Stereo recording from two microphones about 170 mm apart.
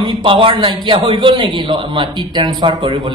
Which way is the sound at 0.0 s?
30° right (ahead or behind).